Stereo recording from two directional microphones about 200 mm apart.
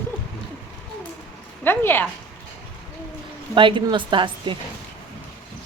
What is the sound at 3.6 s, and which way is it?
A woman's voice, 25° right (ahead or behind).